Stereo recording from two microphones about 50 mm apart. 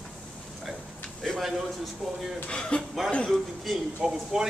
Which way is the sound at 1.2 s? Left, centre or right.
Centre.